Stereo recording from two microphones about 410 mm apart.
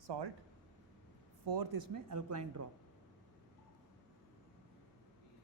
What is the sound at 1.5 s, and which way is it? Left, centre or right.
Speech, right.